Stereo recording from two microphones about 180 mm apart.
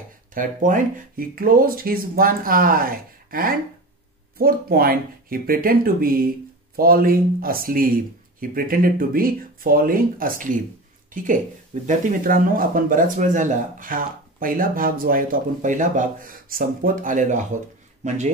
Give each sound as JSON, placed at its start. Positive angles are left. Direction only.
{"t": 0.3, "sound": "speech", "side_deg": -50}